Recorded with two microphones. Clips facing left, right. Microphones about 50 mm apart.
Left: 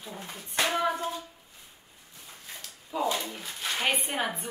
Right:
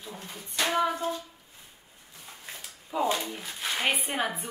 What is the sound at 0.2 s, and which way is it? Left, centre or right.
Speech, centre.